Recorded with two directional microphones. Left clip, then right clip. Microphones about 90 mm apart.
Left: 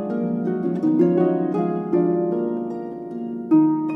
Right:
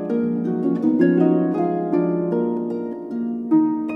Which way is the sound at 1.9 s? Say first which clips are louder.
Left 5 dB; 15° left (ahead or behind).